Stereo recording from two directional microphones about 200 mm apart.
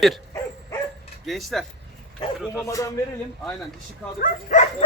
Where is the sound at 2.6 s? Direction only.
15° left (ahead or behind).